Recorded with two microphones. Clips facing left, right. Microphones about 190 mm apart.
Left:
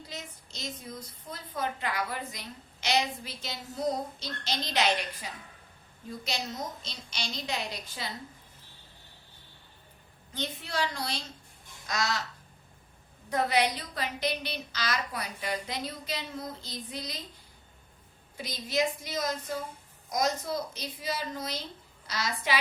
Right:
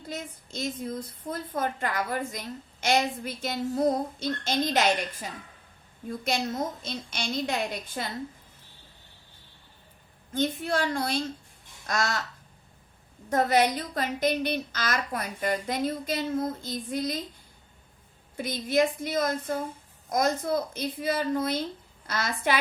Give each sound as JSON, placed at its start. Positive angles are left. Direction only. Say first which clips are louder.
{"t": 0.1, "sound": "a woman's voice", "louder": "right 11 dB", "side_deg": -50}
{"t": 10.3, "sound": "a woman's voice", "louder": "right 7 dB", "side_deg": -50}
{"t": 13.3, "sound": "a woman's voice", "louder": "right 4 dB", "side_deg": -45}
{"t": 18.3, "sound": "a woman's voice", "louder": "right 6 dB", "side_deg": -55}